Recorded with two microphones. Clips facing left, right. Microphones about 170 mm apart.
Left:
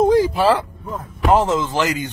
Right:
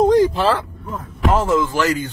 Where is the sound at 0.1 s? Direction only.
10° left (ahead or behind).